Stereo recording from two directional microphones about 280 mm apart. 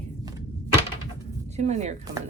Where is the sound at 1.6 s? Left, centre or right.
Right.